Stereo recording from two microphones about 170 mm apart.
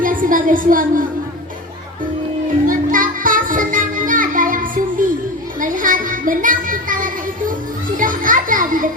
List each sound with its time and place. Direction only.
0.0 s a woman's voice: 55° right (ahead or behind)
2.6 s music: 55° right (ahead or behind)
5.5 s a sound: 50° right (ahead or behind)
7.9 s music: 50° right (ahead or behind)